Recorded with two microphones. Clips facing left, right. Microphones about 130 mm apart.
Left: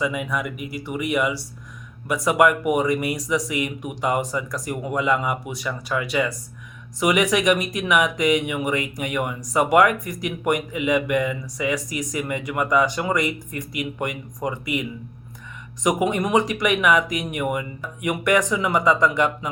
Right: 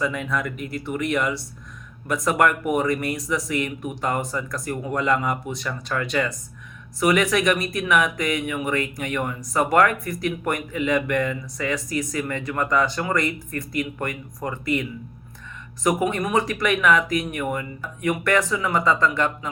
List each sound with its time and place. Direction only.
0.0 s speech: 10° left (ahead or behind)